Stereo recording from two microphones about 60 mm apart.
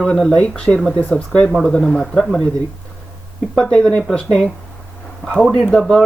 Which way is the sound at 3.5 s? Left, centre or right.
Centre.